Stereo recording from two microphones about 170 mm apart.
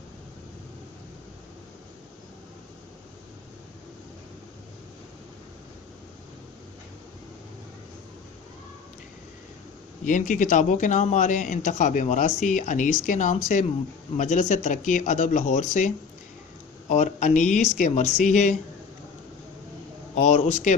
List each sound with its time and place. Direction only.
10.0 s speech: 50° left (ahead or behind)
16.9 s speech: 45° left (ahead or behind)
20.1 s speech: 40° left (ahead or behind)